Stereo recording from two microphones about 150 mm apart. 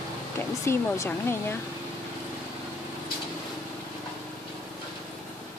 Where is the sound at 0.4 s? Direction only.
15° left (ahead or behind).